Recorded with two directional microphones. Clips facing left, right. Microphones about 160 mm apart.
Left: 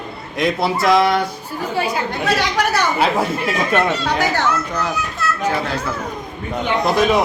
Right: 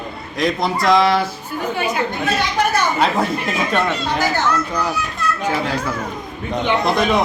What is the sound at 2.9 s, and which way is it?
Speech, 10° left (ahead or behind).